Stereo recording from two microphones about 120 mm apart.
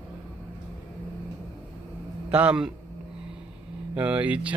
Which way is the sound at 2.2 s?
10° right (ahead or behind).